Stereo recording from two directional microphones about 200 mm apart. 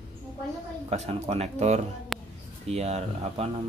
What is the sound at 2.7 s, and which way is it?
Speech, 35° right (ahead or behind).